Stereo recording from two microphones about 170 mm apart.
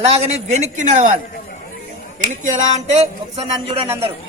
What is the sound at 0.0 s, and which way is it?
A man's voice, 35° right (ahead or behind).